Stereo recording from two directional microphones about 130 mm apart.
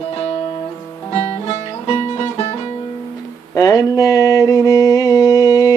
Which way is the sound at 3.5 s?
30° left (ahead or behind).